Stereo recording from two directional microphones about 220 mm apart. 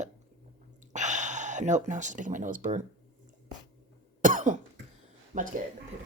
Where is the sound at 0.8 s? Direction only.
35° right (ahead or behind).